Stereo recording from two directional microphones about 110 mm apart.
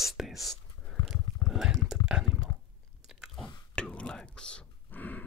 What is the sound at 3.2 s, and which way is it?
Whispering, centre (ahead or behind).